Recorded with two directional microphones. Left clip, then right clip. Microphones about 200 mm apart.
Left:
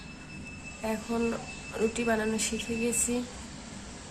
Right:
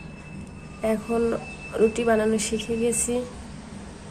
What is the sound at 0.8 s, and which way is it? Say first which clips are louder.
Speech: right 8 dB; 30° right (ahead or behind).